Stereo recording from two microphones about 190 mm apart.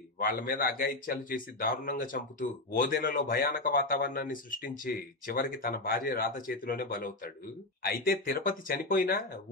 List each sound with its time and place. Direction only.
0.2 s a man's voice: 45° left (ahead or behind)